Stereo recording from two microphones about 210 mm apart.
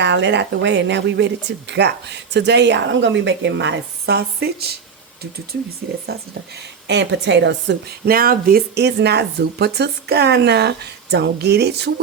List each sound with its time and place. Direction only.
0.0 s speech: 55° right (ahead or behind)
6.1 s a woman's voice: 50° right (ahead or behind)